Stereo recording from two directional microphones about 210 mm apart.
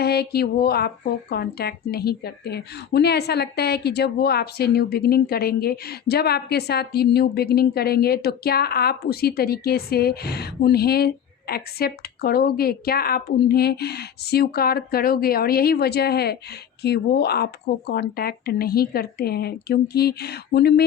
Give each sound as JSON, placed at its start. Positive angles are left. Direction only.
{"t": 0.0, "sound": "a woman's voice", "side_deg": 50}